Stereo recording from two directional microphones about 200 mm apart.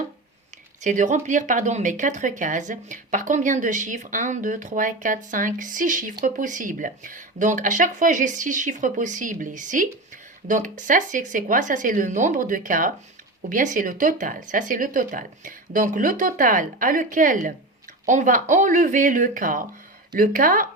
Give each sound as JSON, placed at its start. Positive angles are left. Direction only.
{"t": 0.8, "sound": "speech", "side_deg": -40}